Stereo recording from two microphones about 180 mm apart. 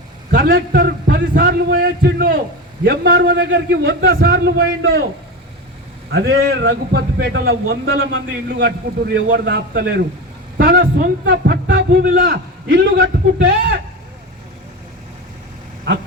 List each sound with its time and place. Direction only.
0.3 s a man's voice: 60° right (ahead or behind)
6.1 s a man's voice: 65° right (ahead or behind)
10.6 s a sound: 55° right (ahead or behind)
11.3 s a man's voice: 75° right (ahead or behind)
12.0 s a man's voice: 60° right (ahead or behind); by 13.8 s 80° right